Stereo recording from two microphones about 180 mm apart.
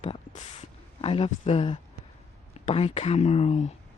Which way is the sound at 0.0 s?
40° left (ahead or behind).